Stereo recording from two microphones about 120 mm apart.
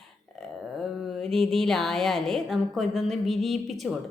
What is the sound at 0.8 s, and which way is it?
A woman's voice, centre (ahead or behind).